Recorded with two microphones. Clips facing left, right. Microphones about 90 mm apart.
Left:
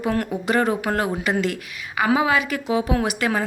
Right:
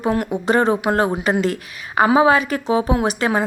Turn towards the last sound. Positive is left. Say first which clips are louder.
# right 3 dB
turn(degrees=-30)  # may be behind; listen again after turning